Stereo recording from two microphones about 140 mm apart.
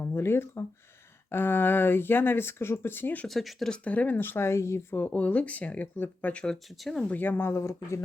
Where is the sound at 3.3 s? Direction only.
Centre (ahead or behind).